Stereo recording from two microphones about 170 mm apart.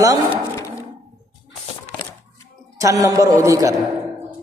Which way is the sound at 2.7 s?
20° right (ahead or behind).